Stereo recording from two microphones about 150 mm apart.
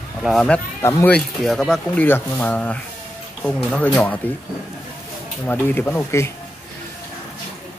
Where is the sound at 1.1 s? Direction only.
5° left (ahead or behind).